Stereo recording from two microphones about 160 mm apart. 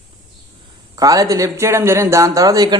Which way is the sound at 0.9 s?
20° right (ahead or behind).